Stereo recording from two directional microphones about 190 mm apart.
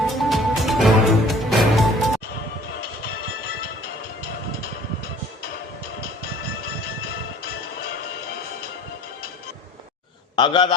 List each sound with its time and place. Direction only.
0.2 s music: centre (ahead or behind)
10.3 s a man's voice: 25° left (ahead or behind)